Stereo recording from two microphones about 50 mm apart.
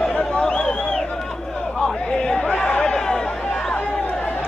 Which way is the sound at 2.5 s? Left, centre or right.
Left.